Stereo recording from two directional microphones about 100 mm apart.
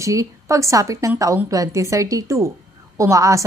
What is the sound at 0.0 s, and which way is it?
A woman's voice, 30° right (ahead or behind).